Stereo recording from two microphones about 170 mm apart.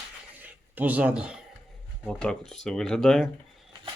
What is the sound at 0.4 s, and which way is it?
Speech, 10° right (ahead or behind).